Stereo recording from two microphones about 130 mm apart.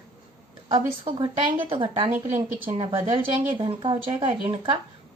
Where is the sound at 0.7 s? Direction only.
40° right (ahead or behind).